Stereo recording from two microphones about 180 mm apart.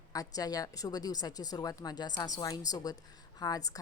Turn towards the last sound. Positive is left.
turn(degrees=20)  # may be behind; listen again after turning